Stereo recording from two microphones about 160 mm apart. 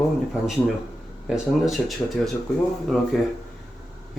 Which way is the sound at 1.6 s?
Centre (ahead or behind).